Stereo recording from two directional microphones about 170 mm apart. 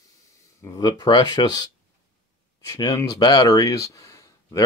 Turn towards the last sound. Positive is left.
turn(degrees=20)  # may be behind; listen again after turning